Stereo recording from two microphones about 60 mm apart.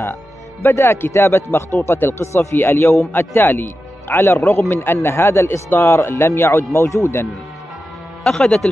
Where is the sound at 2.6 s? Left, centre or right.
Left.